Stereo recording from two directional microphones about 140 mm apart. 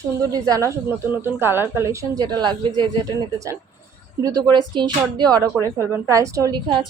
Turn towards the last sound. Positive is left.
turn(degrees=-25)  # may be behind; listen again after turning